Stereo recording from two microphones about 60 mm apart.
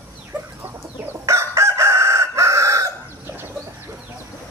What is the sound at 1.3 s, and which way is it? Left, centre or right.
Chicken, right.